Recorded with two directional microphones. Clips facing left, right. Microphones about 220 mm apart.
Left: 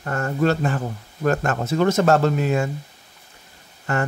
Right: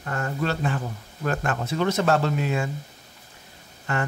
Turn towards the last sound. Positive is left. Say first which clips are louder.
# left 4 dB
turn(degrees=45)  # may be behind; listen again after turning